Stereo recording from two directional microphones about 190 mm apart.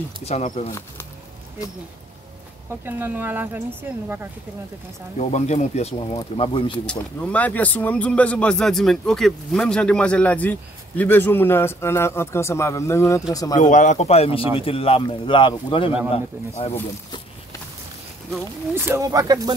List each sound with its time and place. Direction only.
0.2 s speech: 35° left (ahead or behind)
0.7 s speech: 15° left (ahead or behind)
2.8 s speech: 10° right (ahead or behind)
5.3 s a man's voice: 35° left (ahead or behind)
6.9 s speech: 10° left (ahead or behind)
13.6 s a man's voice: 40° left (ahead or behind)
18.4 s speech: 15° right (ahead or behind)